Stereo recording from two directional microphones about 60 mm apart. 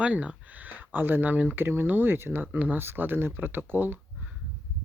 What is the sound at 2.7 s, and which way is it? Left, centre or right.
Speech, right.